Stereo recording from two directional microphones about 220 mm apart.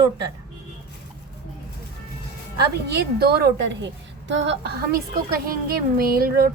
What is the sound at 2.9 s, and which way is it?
Speech, 45° right (ahead or behind).